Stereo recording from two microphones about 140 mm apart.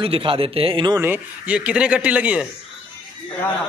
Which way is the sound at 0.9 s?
15° right (ahead or behind).